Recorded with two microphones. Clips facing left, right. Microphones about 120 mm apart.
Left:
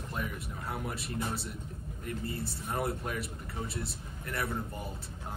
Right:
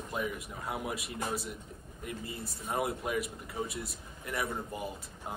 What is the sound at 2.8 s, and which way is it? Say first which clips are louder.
Speech: right 2 dB; centre (ahead or behind).